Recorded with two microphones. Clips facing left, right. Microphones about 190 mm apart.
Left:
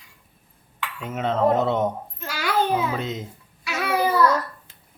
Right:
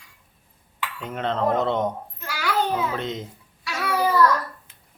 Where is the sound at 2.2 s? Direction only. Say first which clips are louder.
Left 1 dB; 20° left (ahead or behind).